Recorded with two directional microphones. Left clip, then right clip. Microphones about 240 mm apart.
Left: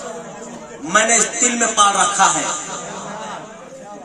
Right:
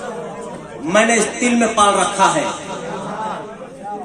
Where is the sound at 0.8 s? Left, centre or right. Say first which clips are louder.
Right 1 dB; left.